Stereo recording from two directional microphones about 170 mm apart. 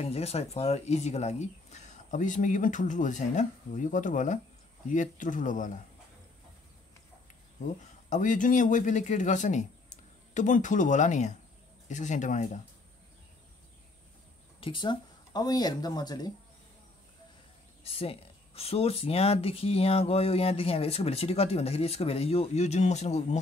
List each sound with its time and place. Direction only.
0.0 s speech: 35° left (ahead or behind)
7.6 s speech: 45° left (ahead or behind)
14.6 s speech: 30° left (ahead or behind)
17.8 s speech: 35° left (ahead or behind)